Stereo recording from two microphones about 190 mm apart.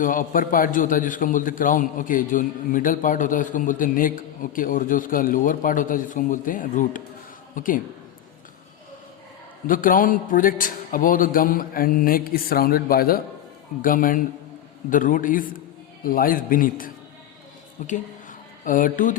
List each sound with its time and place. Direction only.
0.0 s a man's voice: 45° left (ahead or behind)
9.6 s a man's voice: 45° left (ahead or behind)